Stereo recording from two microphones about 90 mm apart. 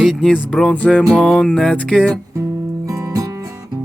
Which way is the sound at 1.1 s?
Centre (ahead or behind).